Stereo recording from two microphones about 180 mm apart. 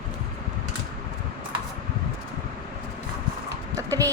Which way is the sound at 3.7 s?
20° right (ahead or behind).